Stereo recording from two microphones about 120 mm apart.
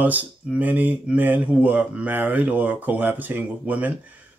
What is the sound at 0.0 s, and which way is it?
Speech, 15° right (ahead or behind).